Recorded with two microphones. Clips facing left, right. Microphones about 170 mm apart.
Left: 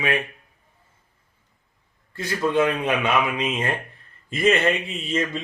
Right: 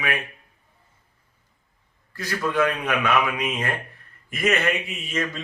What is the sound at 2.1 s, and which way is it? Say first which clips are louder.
A man's voice: left 3 dB; 25° left (ahead or behind).